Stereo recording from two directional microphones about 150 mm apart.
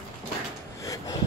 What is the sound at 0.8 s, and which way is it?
Gasp, 20° left (ahead or behind).